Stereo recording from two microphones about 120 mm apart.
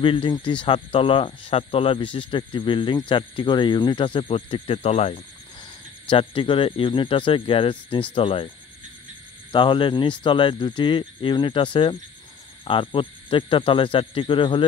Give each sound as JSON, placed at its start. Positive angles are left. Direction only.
{"t": 0.0, "sound": "speech", "side_deg": 45}
{"t": 5.6, "sound": "speech", "side_deg": 45}
{"t": 9.5, "sound": "speech", "side_deg": 40}